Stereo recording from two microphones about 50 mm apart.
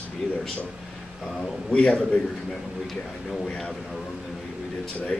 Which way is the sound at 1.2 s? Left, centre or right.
Centre.